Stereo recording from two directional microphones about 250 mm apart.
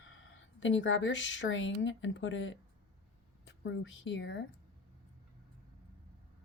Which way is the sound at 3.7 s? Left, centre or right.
Left.